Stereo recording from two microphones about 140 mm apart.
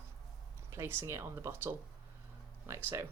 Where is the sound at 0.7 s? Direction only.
20° right (ahead or behind).